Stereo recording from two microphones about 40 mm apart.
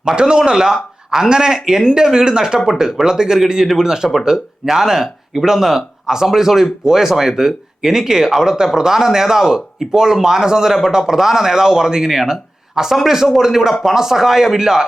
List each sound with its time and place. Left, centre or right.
0.2 s speech: right